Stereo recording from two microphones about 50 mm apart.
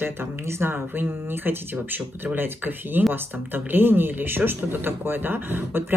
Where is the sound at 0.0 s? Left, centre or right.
Right.